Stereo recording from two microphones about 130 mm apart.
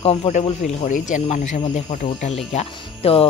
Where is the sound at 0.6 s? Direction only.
70° left (ahead or behind).